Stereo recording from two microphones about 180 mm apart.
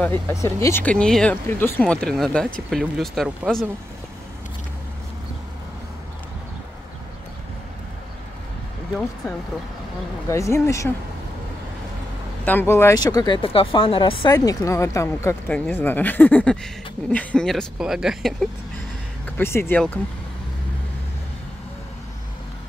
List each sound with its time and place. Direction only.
0.0 s speech: 15° left (ahead or behind)
10.3 s speech: 15° left (ahead or behind)
12.4 s speech: 10° left (ahead or behind); by 14.3 s 30° left (ahead or behind)
14.3 s speech: 20° left (ahead or behind); by 18.5 s centre (ahead or behind)
19.2 s speech: 10° left (ahead or behind)